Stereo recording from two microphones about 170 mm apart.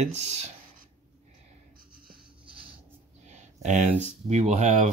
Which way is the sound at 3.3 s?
45° right (ahead or behind).